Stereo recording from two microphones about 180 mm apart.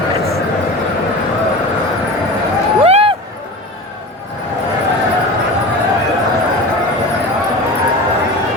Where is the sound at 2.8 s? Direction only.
30° right (ahead or behind).